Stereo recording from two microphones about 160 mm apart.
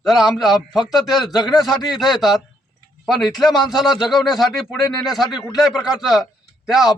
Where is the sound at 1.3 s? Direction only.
25° left (ahead or behind).